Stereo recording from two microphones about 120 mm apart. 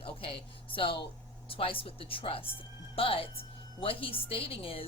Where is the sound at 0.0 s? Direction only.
50° left (ahead or behind).